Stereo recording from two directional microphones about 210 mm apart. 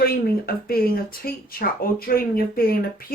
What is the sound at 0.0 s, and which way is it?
A woman's voice, 45° left (ahead or behind).